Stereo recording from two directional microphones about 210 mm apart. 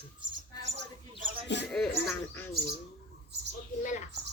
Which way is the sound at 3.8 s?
35° left (ahead or behind).